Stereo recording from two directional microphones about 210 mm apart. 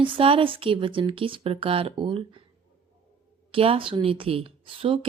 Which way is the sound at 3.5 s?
25° right (ahead or behind).